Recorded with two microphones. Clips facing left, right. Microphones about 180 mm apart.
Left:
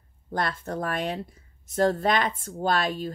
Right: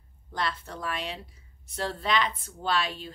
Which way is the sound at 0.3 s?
50° left (ahead or behind).